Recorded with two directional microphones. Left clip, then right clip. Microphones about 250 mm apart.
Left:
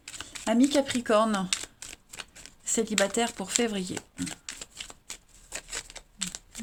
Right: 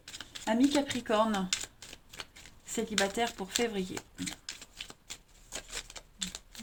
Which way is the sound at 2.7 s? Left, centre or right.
Left.